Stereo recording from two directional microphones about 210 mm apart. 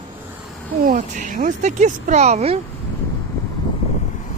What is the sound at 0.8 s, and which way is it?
Speech, 35° right (ahead or behind).